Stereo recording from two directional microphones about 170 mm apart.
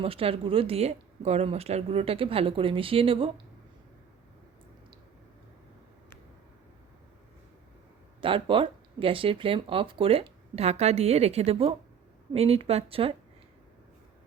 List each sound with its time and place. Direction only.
0.0 s speech: 35° right (ahead or behind)
8.2 s speech: 30° right (ahead or behind)